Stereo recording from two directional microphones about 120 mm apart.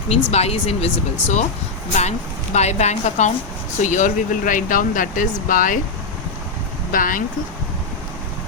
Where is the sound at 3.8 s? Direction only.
90° left.